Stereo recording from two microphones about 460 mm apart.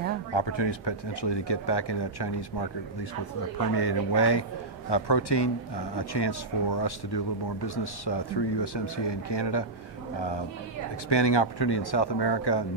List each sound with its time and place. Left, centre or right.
0.3 s a man's voice: left
11.1 s a man's voice: left